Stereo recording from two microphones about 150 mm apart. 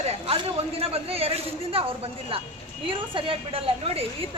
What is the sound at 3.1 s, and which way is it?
Speech, 35° right (ahead or behind).